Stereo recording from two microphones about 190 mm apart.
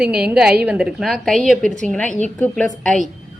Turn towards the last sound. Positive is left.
turn(degrees=0)  # may be behind; listen again after turning